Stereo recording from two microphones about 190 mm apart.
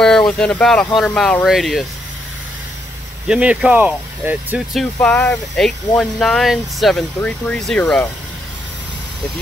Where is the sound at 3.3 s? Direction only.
5° right (ahead or behind).